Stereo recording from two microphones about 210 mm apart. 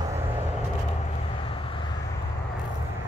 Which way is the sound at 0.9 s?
30° left (ahead or behind).